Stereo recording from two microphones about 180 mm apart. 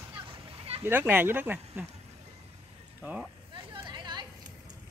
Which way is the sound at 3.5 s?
25° right (ahead or behind).